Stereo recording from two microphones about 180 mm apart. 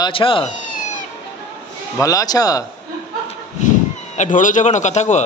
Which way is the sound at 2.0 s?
20° left (ahead or behind).